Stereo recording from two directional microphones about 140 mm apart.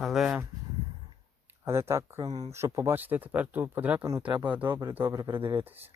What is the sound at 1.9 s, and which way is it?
Speech, 20° right (ahead or behind).